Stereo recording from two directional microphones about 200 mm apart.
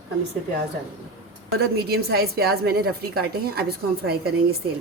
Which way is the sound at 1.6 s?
50° right (ahead or behind).